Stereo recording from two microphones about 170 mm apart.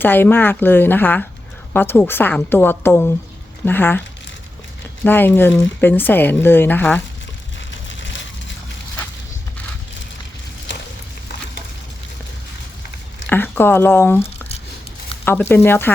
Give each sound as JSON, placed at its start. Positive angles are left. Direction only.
{"t": 0.0, "sound": "speech", "side_deg": 10}
{"t": 5.0, "sound": "speech", "side_deg": 10}
{"t": 7.7, "sound": "a sound", "side_deg": 90}
{"t": 13.2, "sound": "speech", "side_deg": 10}